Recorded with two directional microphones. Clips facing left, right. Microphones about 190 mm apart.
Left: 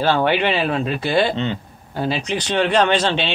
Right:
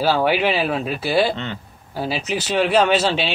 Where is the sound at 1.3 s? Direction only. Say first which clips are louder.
Left 5 dB; 20° left (ahead or behind).